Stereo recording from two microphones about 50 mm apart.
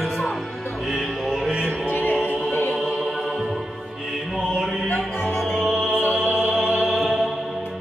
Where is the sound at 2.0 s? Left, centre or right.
Left.